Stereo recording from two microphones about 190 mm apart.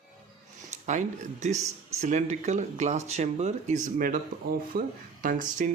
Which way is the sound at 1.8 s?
35° right (ahead or behind).